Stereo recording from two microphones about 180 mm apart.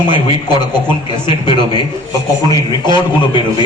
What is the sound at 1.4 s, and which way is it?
A man's voice, 25° left (ahead or behind).